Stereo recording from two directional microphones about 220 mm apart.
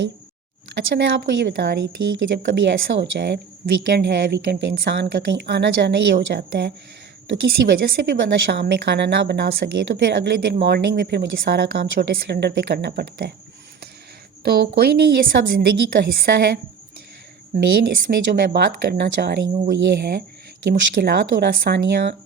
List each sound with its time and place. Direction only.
0.7 s a woman's voice: 50° right (ahead or behind)
14.4 s a woman's voice: 45° right (ahead or behind)